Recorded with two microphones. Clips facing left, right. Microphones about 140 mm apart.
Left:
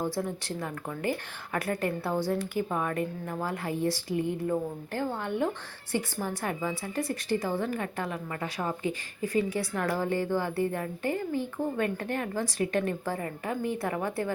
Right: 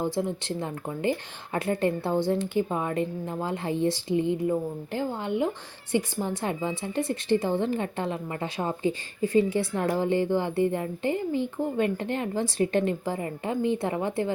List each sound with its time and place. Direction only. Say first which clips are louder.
0.0 s a woman's voice: right 3 dB; 20° right (ahead or behind)